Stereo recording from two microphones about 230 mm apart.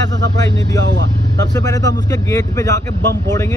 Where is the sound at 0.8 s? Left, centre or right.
Right.